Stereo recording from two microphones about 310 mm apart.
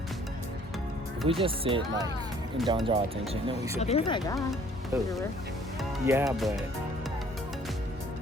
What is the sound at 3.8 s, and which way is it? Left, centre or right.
Speech, centre.